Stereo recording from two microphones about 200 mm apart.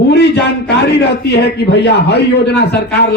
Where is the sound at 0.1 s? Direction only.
55° left (ahead or behind).